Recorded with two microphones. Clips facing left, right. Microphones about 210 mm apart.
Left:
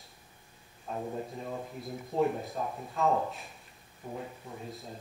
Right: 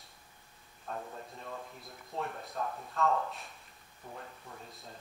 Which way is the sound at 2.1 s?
5° left (ahead or behind).